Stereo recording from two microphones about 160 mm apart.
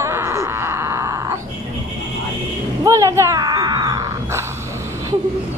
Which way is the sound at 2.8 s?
20° right (ahead or behind).